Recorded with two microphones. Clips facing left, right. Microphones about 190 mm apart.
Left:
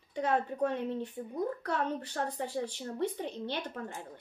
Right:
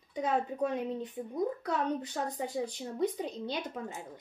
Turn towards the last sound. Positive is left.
turn(degrees=-10)  # may be behind; listen again after turning